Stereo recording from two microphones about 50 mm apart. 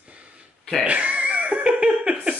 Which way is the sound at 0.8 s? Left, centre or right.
Right.